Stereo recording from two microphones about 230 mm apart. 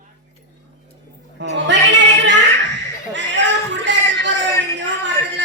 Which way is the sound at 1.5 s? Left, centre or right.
Right.